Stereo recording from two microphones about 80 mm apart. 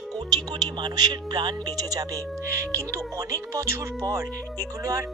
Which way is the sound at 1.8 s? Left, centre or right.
Right.